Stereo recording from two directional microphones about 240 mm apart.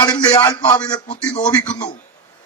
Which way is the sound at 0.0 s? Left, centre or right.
Centre.